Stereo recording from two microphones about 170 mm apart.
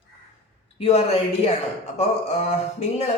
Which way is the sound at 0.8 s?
35° left (ahead or behind).